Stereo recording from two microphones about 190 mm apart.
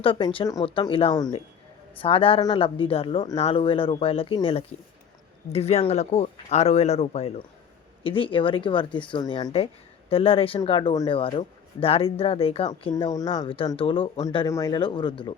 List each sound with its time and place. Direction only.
0.0 s speech: 25° left (ahead or behind)
12.9 s speech: 20° left (ahead or behind)